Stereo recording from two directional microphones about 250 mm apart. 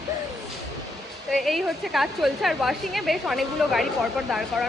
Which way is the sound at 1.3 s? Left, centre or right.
Centre.